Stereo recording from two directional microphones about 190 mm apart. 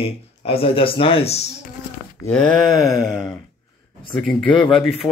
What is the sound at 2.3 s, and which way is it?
Speech, centre (ahead or behind).